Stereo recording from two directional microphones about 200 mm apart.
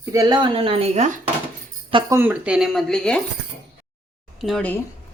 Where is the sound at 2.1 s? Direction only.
10° right (ahead or behind).